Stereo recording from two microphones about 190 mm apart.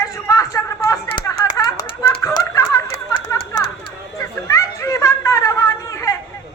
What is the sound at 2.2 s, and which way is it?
Music, 15° left (ahead or behind).